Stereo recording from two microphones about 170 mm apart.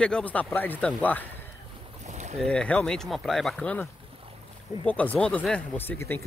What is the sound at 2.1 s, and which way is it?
Boat, 40° right (ahead or behind).